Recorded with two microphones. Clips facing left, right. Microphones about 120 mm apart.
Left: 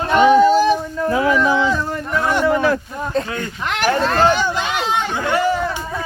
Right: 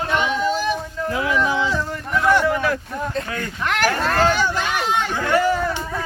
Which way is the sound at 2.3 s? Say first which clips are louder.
Even; 20° left (ahead or behind).